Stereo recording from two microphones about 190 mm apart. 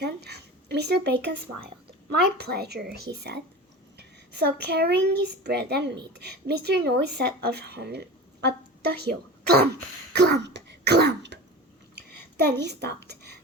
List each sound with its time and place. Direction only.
0.0 s speech: 60° right (ahead or behind)
2.4 s a woman's voice: 60° right (ahead or behind)
10.1 s throat clearing: 60° right (ahead or behind)
11.9 s a sound: 65° right (ahead or behind)